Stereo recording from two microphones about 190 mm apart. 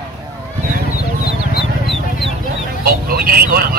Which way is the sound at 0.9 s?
55° left (ahead or behind).